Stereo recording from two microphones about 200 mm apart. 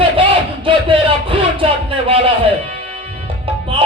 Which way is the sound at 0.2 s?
25° right (ahead or behind).